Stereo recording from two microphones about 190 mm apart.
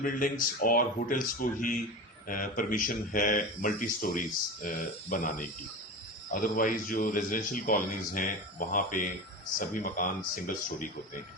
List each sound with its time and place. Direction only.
0.0 s speech: 45° left (ahead or behind)